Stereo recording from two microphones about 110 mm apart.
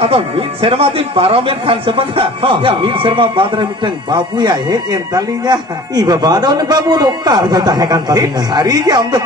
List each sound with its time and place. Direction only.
0.0 s a man's voice: 60° right (ahead or behind); by 9.2 s 40° right (ahead or behind)